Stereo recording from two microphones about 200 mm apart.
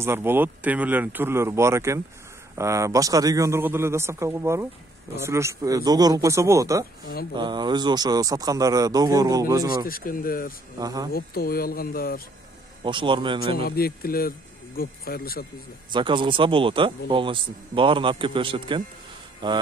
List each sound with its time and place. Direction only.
0.0 s a man's voice: 10° right (ahead or behind)
9.8 s speech: 45° left (ahead or behind)
10.8 s speech: 20° right (ahead or behind)
11.1 s speech: 50° left (ahead or behind)
12.8 s speech: 25° right (ahead or behind)
13.6 s speech: 50° left (ahead or behind)
15.9 s speech: 25° right (ahead or behind)